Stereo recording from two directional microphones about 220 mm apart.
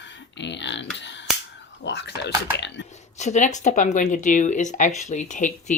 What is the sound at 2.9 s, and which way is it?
Speech, 30° left (ahead or behind).